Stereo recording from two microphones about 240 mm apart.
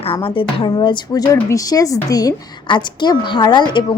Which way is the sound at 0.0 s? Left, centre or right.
Left.